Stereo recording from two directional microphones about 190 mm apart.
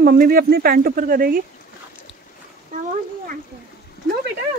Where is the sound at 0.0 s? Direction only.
50° right (ahead or behind).